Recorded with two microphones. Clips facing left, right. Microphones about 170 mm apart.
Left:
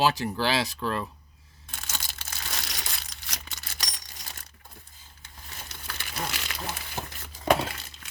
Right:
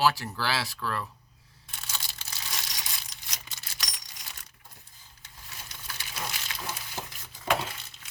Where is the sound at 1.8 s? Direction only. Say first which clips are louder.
Left 2 dB; 45° left (ahead or behind).